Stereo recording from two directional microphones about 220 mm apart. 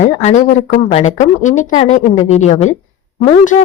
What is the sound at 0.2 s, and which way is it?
Speech, 30° left (ahead or behind).